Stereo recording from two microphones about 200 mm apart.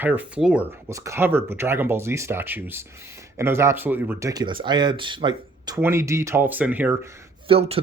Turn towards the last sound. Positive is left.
turn(degrees=-30)  # may be behind; listen again after turning